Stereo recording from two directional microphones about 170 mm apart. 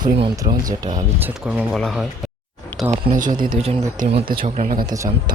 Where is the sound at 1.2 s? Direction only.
10° right (ahead or behind).